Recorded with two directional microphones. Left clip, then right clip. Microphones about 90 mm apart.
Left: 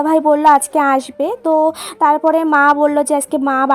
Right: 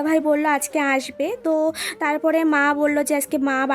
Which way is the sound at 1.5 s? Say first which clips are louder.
Left 7 dB; 25° left (ahead or behind).